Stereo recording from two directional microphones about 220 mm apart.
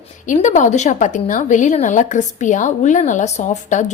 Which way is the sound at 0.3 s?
35° left (ahead or behind).